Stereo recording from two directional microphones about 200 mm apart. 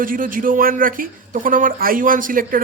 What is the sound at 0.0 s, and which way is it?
Speech, 45° right (ahead or behind).